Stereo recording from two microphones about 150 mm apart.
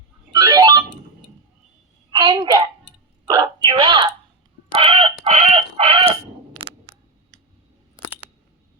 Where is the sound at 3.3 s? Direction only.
30° right (ahead or behind).